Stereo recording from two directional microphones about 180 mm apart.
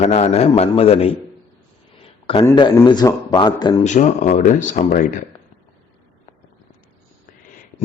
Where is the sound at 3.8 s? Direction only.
40° left (ahead or behind).